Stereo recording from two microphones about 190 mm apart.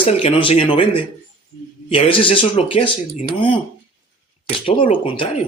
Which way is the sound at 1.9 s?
30° left (ahead or behind).